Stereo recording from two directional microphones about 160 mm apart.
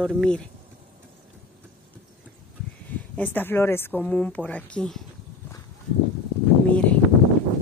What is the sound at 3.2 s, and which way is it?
Speech, 15° left (ahead or behind).